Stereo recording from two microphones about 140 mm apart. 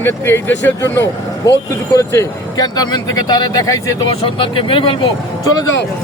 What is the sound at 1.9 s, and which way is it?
Speech, 25° left (ahead or behind).